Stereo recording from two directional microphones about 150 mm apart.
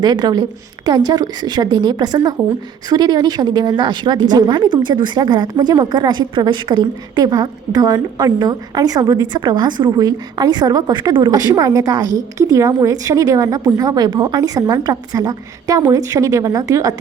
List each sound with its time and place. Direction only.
0.0 s a woman's voice: 30° right (ahead or behind)